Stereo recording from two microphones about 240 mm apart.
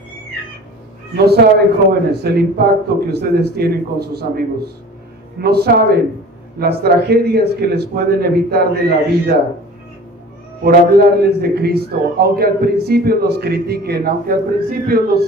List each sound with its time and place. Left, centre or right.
1.1 s a man's voice: right
10.6 s a man's voice: right